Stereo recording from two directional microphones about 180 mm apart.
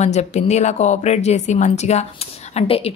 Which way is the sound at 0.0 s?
40° left (ahead or behind).